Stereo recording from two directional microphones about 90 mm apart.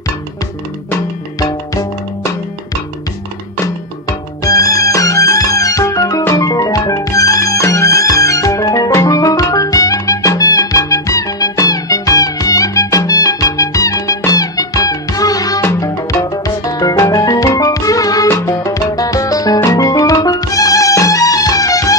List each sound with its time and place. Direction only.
4.5 s music: 40° left (ahead or behind)